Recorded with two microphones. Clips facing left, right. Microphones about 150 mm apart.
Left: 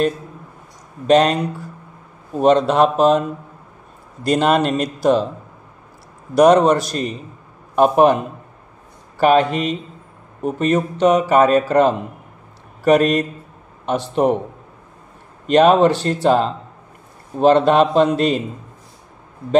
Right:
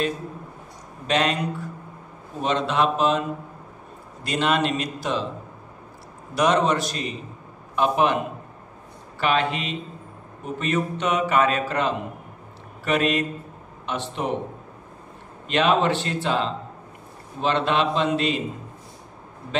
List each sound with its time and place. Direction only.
1.0 s a man's voice: 40° left (ahead or behind)
2.4 s a man's voice: 40° left (ahead or behind)
6.3 s a man's voice: 40° left (ahead or behind)
9.2 s speech: 45° left (ahead or behind)
15.4 s speech: 45° left (ahead or behind)